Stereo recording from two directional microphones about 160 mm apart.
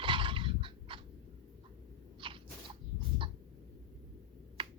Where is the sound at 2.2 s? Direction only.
30° right (ahead or behind).